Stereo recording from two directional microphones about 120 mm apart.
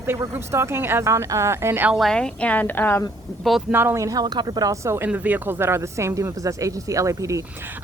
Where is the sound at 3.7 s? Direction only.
20° right (ahead or behind).